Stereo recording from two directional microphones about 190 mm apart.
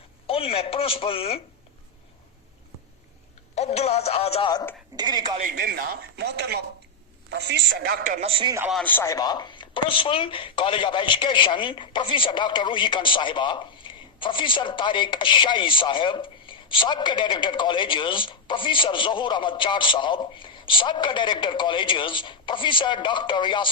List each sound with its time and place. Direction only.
0.3 s speech: 30° left (ahead or behind)
3.5 s speech: 35° left (ahead or behind)
4.9 s a woman's voice: 20° right (ahead or behind)
5.4 s a man's voice: 50° right (ahead or behind); by 8.5 s 30° right (ahead or behind)
8.7 s speech: 10° left (ahead or behind); by 23.6 s 25° left (ahead or behind)